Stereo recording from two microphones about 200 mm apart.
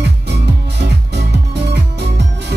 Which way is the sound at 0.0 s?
55° right (ahead or behind).